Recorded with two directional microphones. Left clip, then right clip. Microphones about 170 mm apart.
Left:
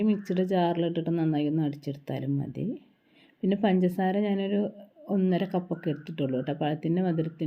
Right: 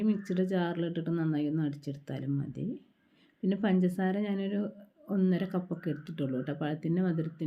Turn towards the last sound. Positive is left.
turn(degrees=15)  # may be behind; listen again after turning